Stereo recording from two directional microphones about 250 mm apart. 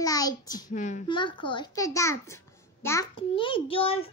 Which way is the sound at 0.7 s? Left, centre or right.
Left.